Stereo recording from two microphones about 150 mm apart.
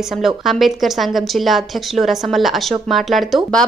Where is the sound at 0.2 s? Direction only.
Centre (ahead or behind).